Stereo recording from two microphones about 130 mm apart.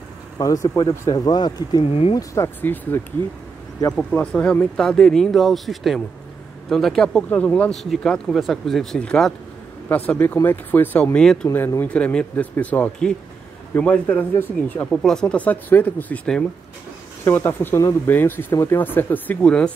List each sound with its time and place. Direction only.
0.4 s speech: 25° left (ahead or behind)
1.9 s speech: 50° left (ahead or behind)
2.1 s speech: 20° left (ahead or behind)
11.4 s speech: 20° left (ahead or behind)